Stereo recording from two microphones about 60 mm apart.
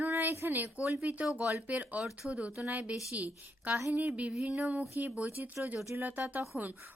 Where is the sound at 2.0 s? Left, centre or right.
Centre.